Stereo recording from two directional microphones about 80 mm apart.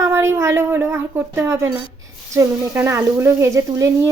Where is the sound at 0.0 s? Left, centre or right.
Right.